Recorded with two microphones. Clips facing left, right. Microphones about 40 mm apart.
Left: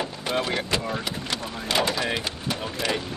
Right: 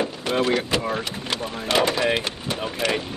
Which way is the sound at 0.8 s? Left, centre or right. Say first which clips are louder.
Right 3 dB; centre.